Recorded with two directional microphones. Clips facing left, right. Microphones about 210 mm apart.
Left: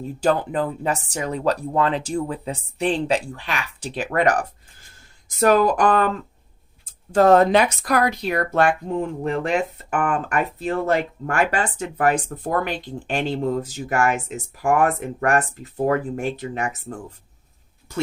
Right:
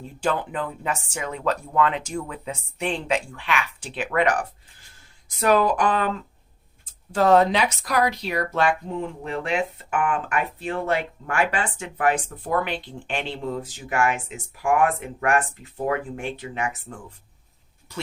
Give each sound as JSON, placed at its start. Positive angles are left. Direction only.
{"t": 0.2, "sound": "speech", "side_deg": 40}